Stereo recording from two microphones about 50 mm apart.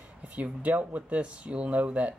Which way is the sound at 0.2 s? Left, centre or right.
Right.